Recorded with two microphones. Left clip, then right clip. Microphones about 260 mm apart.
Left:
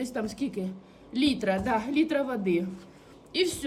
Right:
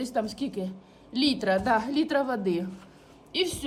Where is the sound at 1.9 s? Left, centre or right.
Right.